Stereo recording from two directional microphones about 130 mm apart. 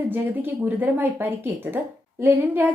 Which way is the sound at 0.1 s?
15° right (ahead or behind).